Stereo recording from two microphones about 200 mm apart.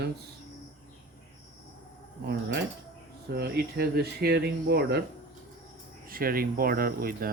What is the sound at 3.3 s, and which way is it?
Speech, 55° right (ahead or behind).